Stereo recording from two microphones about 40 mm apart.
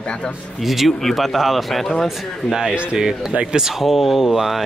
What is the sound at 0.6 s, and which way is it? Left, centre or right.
Speech, centre.